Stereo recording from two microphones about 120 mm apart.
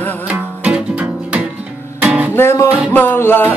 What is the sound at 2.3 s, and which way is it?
Music, 20° left (ahead or behind).